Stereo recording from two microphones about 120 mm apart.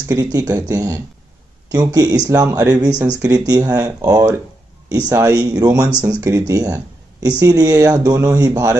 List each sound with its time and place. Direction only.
0.1 s speech: 30° right (ahead or behind)